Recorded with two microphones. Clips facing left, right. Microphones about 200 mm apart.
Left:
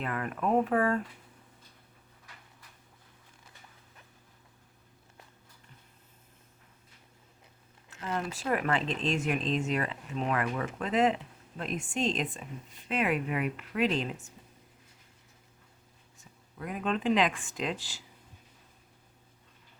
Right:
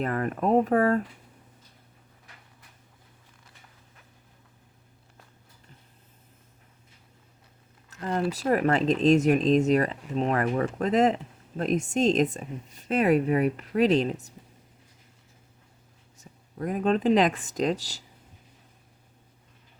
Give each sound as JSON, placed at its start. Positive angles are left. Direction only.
{"t": 0.0, "sound": "speech", "side_deg": -40}
{"t": 7.9, "sound": "speech", "side_deg": -40}
{"t": 16.1, "sound": "speech", "side_deg": -40}